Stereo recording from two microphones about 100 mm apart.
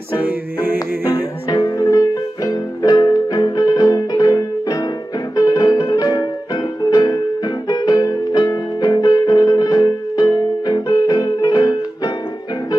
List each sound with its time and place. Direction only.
0.2 s music: 20° right (ahead or behind)
0.7 s music: 35° left (ahead or behind)